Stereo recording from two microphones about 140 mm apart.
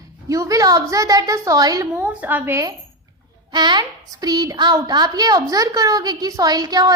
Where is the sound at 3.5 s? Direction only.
30° right (ahead or behind).